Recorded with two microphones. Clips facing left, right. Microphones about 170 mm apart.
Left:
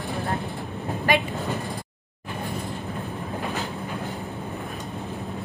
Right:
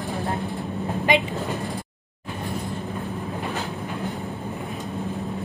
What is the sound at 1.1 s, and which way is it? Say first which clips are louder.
Speech: right 1 dB; 20° right (ahead or behind).